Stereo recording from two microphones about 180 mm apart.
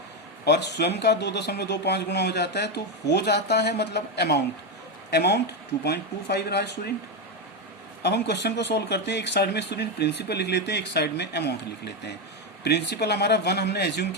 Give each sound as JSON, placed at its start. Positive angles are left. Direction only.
{"t": 0.4, "sound": "speech", "side_deg": 70}
{"t": 8.0, "sound": "speech", "side_deg": 70}
{"t": 12.6, "sound": "speech", "side_deg": 70}